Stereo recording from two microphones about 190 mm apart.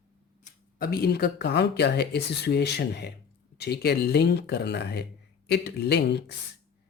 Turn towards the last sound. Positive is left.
turn(degrees=60)  # may be behind; listen again after turning